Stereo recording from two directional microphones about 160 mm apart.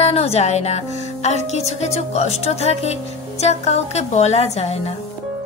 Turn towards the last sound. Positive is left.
turn(degrees=40)  # may be behind; listen again after turning